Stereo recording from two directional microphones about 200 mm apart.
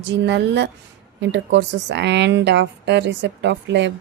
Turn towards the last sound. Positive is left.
turn(degrees=-60)  # may be behind; listen again after turning